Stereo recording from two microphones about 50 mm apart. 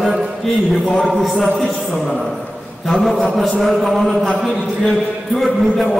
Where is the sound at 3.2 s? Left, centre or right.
Centre.